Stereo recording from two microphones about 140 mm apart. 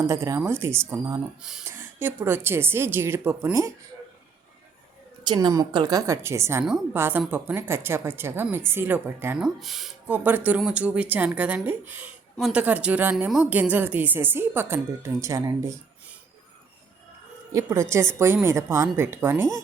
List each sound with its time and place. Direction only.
0.1 s a woman's voice: 20° right (ahead or behind)
1.4 s speech: 5° right (ahead or behind)
1.6 s a woman's voice: 15° right (ahead or behind)
5.2 s a woman's voice: 30° right (ahead or behind); by 9.4 s 15° right (ahead or behind)
9.4 s speech: centre (ahead or behind)
10.1 s a woman's voice: 15° right (ahead or behind)
17.5 s a woman's voice: 20° right (ahead or behind)